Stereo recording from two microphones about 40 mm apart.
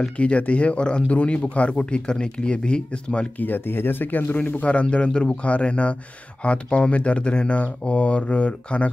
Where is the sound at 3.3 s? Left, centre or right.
Left.